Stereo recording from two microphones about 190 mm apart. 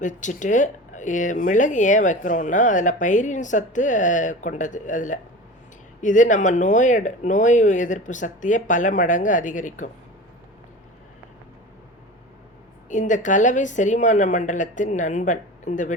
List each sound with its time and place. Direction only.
0.0 s speech: 40° left (ahead or behind)
12.9 s speech: 40° left (ahead or behind)